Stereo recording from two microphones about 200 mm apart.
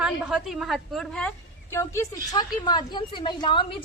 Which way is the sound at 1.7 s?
15° left (ahead or behind).